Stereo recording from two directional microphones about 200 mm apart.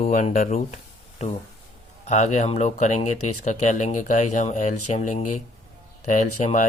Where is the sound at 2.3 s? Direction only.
35° left (ahead or behind).